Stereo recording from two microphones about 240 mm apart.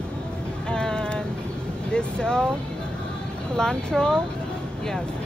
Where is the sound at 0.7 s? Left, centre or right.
Centre.